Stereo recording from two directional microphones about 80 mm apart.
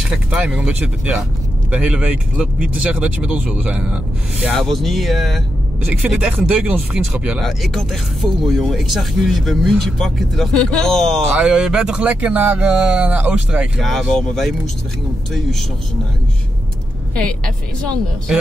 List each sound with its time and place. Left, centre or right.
0.0 s speech: centre
4.6 s speech: centre
6.0 s speech: centre
7.3 s speech: centre
11.3 s speech: centre
12.0 s speech: centre
13.7 s speech: centre
17.1 s a woman's voice: centre